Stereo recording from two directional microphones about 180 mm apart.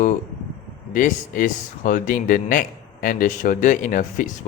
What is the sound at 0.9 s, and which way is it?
Speech, 50° left (ahead or behind).